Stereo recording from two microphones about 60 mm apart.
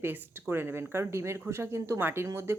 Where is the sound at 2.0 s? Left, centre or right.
Right.